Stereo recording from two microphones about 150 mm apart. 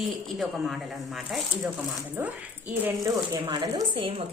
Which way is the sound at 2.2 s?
15° right (ahead or behind).